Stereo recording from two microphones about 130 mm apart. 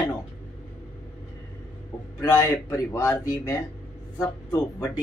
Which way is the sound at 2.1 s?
20° left (ahead or behind).